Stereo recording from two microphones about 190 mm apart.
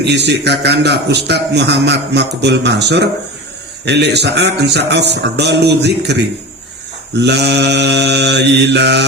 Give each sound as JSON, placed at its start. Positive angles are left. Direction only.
{"t": 0.0, "sound": "a man's voice", "side_deg": -65}